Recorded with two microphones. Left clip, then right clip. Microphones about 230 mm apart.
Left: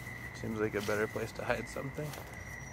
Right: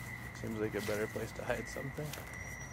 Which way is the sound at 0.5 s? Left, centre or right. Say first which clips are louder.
Left 3 dB; centre.